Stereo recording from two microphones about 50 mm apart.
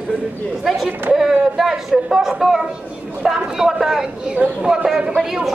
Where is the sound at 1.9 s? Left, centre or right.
Centre.